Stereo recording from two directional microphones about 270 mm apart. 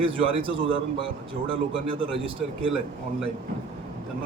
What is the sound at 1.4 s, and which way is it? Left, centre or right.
Speech, centre.